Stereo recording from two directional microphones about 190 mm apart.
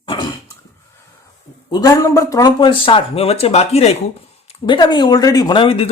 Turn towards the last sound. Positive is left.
turn(degrees=30)  # may be behind; listen again after turning